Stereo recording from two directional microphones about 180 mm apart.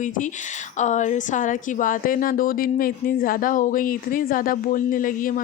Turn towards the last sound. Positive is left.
turn(degrees=50)  # may be behind; listen again after turning